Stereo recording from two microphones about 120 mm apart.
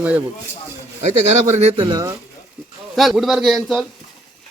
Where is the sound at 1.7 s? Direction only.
45° right (ahead or behind).